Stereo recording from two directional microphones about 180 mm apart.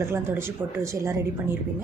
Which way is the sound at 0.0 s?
15° right (ahead or behind).